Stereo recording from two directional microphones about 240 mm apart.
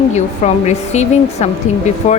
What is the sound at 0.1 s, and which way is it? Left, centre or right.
A woman's voice, left.